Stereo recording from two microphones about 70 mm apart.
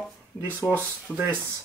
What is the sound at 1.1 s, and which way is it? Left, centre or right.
Speech, centre.